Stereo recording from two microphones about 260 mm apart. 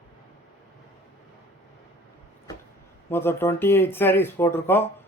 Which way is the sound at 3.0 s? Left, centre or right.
Centre.